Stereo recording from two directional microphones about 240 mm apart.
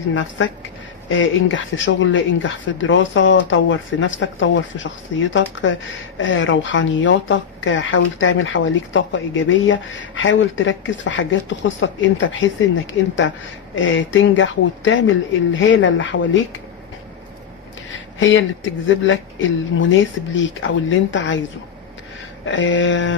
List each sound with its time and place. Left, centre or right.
0.1 s speech: left
13.0 s speech: left
18.2 s speech: left
22.5 s speech: left